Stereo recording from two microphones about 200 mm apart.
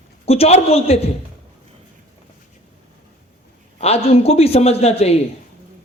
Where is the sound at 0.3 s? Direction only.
30° left (ahead or behind).